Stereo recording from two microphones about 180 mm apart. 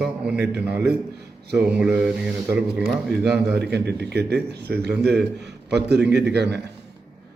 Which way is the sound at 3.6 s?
65° right (ahead or behind).